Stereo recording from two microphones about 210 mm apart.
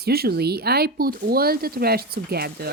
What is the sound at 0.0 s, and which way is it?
Speech, 50° right (ahead or behind).